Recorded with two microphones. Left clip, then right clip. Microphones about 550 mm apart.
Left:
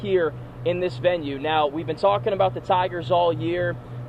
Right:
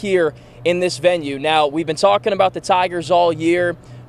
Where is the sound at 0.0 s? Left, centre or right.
Right.